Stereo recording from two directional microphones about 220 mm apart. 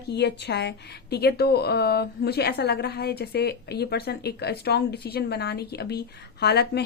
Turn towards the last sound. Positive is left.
turn(degrees=50)  # may be behind; listen again after turning